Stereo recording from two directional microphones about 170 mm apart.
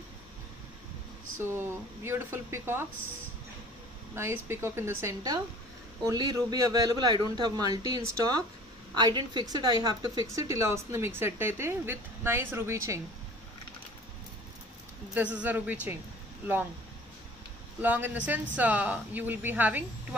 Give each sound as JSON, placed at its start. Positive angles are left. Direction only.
{"t": 2.0, "sound": "speech", "side_deg": -15}
{"t": 4.1, "sound": "speech", "side_deg": -15}
{"t": 15.1, "sound": "speech", "side_deg": -10}
{"t": 17.8, "sound": "speech", "side_deg": -10}